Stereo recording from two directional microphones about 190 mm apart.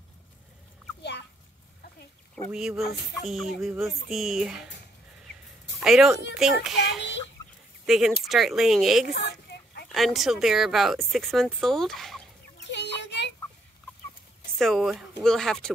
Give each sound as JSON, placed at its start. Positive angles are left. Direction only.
{"t": 2.5, "sound": "speech", "side_deg": 0}
{"t": 5.8, "sound": "speech", "side_deg": 0}
{"t": 9.1, "sound": "a sound", "side_deg": 60}
{"t": 9.9, "sound": "speech", "side_deg": 0}
{"t": 12.5, "sound": "goat", "side_deg": 65}
{"t": 14.6, "sound": "speech", "side_deg": 0}